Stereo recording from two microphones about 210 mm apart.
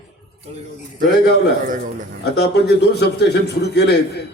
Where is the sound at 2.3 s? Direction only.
50° left (ahead or behind).